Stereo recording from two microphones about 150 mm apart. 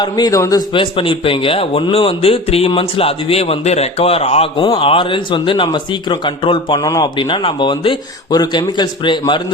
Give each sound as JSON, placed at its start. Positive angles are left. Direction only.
{"t": 0.0, "sound": "a man's voice", "side_deg": 25}
{"t": 0.7, "sound": "a man's voice", "side_deg": 35}